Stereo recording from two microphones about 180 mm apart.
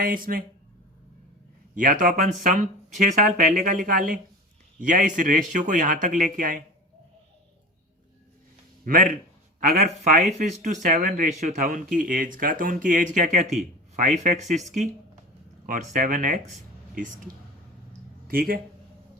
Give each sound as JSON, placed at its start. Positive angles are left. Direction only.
{"t": 0.0, "sound": "speech", "side_deg": -55}
{"t": 1.7, "sound": "speech", "side_deg": -50}
{"t": 8.8, "sound": "speech", "side_deg": -45}
{"t": 13.6, "sound": "a sound", "side_deg": -40}
{"t": 14.3, "sound": "speech", "side_deg": -40}